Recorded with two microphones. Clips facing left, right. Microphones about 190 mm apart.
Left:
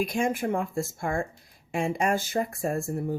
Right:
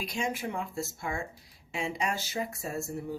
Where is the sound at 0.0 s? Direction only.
50° left (ahead or behind).